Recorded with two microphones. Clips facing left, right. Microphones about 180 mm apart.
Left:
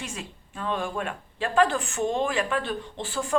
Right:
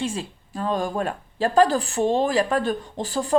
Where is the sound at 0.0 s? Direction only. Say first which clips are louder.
Right 9 dB; 30° right (ahead or behind).